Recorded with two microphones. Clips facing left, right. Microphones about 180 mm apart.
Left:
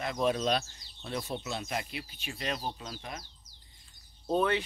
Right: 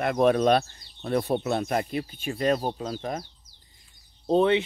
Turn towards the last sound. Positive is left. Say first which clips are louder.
# right 7 dB
turn(degrees=-25)  # may be behind; listen again after turning